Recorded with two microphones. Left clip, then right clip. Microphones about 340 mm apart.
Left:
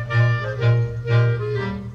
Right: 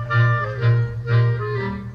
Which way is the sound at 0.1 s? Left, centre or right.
Left.